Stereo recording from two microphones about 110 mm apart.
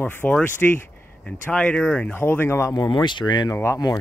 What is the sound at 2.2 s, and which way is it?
Speech, 25° left (ahead or behind).